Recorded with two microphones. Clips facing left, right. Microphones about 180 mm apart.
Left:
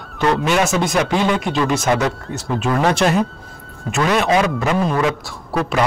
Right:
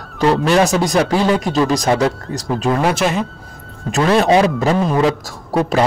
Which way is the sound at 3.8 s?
35° right (ahead or behind).